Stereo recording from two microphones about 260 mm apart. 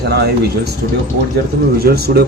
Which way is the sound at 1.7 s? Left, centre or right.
Right.